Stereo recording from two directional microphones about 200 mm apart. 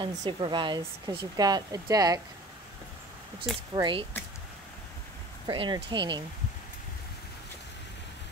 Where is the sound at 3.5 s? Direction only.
25° right (ahead or behind).